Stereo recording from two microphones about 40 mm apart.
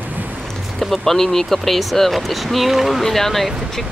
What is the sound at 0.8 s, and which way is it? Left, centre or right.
Speech, centre.